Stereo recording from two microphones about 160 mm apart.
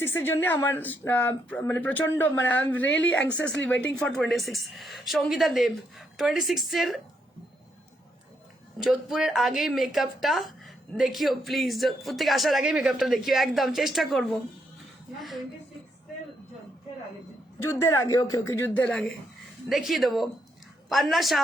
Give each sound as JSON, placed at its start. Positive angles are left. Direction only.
{"t": 0.0, "sound": "a woman's voice", "side_deg": 15}
{"t": 8.8, "sound": "a woman's voice", "side_deg": 0}
{"t": 17.6, "sound": "speech", "side_deg": 15}
{"t": 18.9, "sound": "a woman's voice", "side_deg": 5}